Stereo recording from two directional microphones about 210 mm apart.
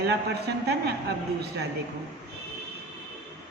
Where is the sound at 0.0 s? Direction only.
50° right (ahead or behind).